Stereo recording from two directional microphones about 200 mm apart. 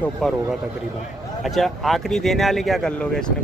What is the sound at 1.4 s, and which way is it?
Speech, centre (ahead or behind).